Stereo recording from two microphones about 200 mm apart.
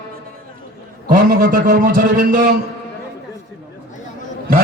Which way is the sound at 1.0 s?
45° right (ahead or behind).